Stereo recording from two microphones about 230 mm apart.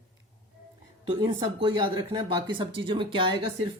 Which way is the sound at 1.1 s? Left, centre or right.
Right.